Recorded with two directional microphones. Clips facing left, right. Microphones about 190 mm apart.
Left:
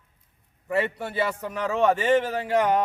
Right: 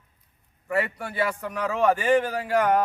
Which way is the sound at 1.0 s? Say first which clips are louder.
Even; 25° left (ahead or behind).